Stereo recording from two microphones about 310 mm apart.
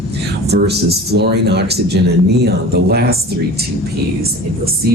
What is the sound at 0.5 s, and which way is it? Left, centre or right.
Speech, right.